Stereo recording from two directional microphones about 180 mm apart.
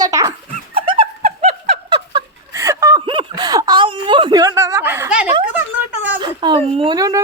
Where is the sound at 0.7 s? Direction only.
30° right (ahead or behind); by 5.2 s 10° right (ahead or behind).